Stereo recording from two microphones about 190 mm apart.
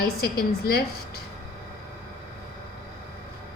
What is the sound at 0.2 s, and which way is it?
Speech, 55° left (ahead or behind).